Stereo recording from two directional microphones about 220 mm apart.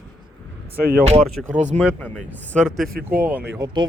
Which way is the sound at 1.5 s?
30° right (ahead or behind).